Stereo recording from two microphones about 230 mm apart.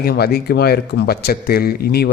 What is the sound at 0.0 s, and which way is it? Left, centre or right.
Speech, left.